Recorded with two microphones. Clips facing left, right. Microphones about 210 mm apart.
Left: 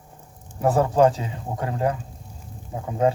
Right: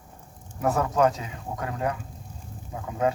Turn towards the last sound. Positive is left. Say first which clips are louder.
# left 4 dB
turn(degrees=30)  # may be behind; listen again after turning